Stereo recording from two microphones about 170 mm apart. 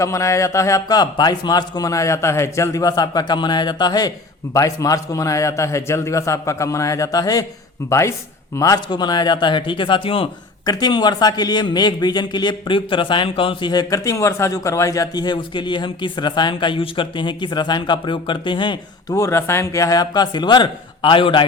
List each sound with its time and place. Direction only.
0.0 s a man's voice: 20° left (ahead or behind)